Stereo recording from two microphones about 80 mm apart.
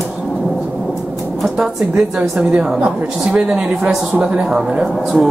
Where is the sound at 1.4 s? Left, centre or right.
Centre.